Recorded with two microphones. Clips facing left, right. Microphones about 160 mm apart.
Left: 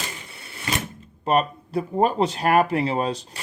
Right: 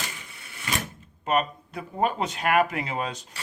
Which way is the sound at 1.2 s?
35° left (ahead or behind).